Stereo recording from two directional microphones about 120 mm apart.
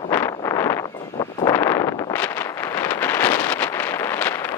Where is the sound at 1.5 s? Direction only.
20° left (ahead or behind).